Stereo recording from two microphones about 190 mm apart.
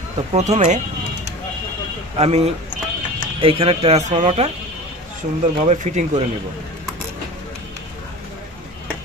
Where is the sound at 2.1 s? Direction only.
35° right (ahead or behind).